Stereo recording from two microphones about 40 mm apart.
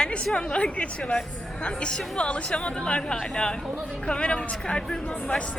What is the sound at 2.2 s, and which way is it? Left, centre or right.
A woman's voice, left.